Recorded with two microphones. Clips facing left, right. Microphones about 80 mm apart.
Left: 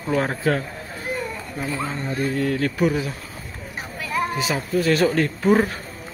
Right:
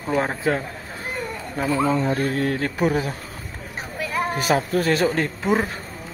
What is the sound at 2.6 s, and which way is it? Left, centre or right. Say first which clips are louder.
Speech: left 1 dB; right.